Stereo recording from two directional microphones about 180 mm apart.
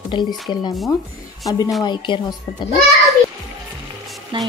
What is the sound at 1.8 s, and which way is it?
Speech, 25° left (ahead or behind).